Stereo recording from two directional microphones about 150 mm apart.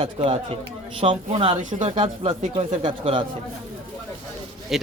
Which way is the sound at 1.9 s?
35° right (ahead or behind).